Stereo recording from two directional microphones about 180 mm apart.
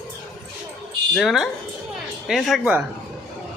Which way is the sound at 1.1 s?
Centre (ahead or behind).